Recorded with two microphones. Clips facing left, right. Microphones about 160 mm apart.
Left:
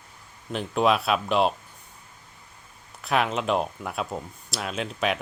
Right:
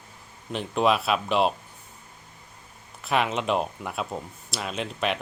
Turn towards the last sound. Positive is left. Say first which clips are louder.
# left 1 dB
turn(degrees=0)  # may be behind; listen again after turning